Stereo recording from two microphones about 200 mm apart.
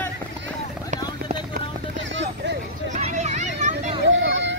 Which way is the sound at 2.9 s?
35° right (ahead or behind).